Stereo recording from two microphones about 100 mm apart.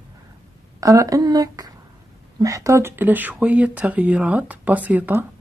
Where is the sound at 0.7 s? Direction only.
35° right (ahead or behind); by 5.2 s 15° right (ahead or behind).